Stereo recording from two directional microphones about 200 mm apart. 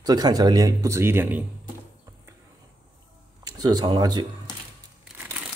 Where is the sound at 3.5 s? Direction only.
20° right (ahead or behind).